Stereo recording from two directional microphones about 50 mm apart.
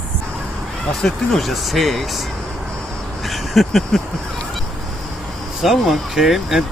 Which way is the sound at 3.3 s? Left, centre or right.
Centre.